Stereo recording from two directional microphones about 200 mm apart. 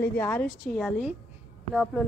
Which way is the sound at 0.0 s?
10° left (ahead or behind).